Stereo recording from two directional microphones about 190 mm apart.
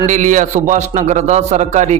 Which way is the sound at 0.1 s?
40° right (ahead or behind).